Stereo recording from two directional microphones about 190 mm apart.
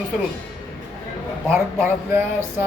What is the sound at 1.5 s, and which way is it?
Speech, 10° right (ahead or behind).